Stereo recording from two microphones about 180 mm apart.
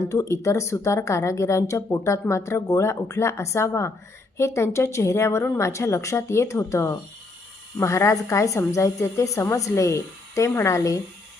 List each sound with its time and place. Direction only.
0.0 s a woman's voice: 15° left (ahead or behind)